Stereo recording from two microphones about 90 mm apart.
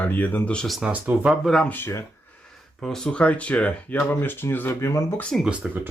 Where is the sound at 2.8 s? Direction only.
5° left (ahead or behind); by 5.1 s 35° left (ahead or behind).